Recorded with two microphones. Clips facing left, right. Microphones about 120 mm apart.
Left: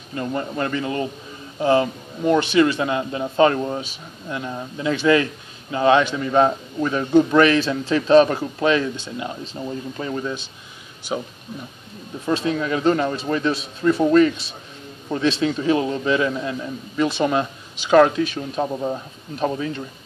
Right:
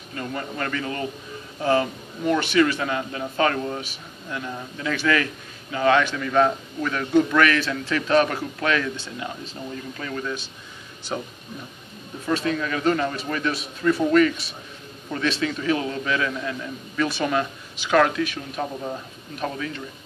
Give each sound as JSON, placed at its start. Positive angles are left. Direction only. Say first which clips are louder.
{"t": 0.1, "sound": "a man's voice", "louder": "left 5 dB", "side_deg": 25}
{"t": 12.3, "sound": "a man's voice", "louder": "left 3 dB", "side_deg": 20}